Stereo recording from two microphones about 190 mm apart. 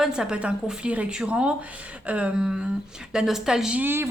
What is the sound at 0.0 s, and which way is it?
A woman's voice, 5° right (ahead or behind).